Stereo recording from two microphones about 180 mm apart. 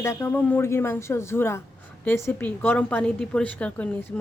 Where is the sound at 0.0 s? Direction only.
15° left (ahead or behind).